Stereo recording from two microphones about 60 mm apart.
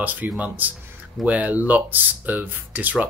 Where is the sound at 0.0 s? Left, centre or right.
Right.